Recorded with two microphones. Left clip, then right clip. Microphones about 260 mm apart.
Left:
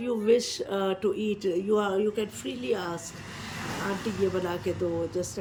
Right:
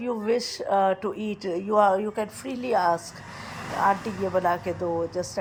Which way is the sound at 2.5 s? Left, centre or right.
Right.